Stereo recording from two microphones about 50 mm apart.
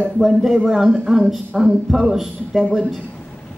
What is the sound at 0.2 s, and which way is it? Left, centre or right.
A man's voice, centre.